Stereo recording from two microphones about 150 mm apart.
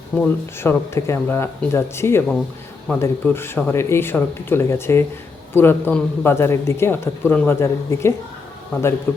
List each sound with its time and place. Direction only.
0.2 s a man's voice: 15° left (ahead or behind)